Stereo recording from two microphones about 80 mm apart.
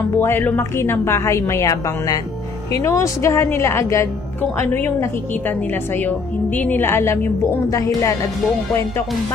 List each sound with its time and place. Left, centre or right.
0.2 s a woman's voice: left
4.4 s a woman's voice: left
6.9 s a woman's voice: left
7.7 s speech: left